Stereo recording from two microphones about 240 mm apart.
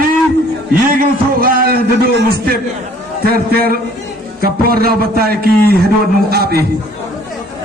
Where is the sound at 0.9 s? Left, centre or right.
Right.